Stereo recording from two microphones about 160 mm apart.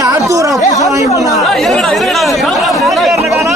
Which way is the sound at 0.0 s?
20° right (ahead or behind).